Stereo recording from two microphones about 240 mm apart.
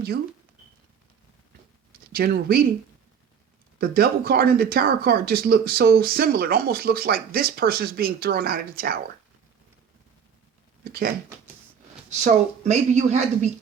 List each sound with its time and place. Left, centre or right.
2.1 s speech: right
3.8 s speech: right
10.8 s speech: right
12.2 s speech: right